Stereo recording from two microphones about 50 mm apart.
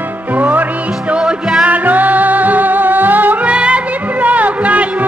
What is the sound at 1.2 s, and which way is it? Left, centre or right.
Music, centre.